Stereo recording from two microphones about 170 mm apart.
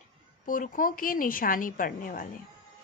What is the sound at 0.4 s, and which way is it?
A woman's voice, 55° left (ahead or behind).